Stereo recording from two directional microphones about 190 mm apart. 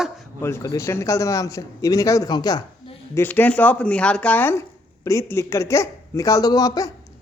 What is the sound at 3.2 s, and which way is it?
A man's voice, 10° left (ahead or behind).